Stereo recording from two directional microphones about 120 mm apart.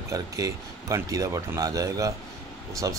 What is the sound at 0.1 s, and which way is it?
Speech, 30° right (ahead or behind).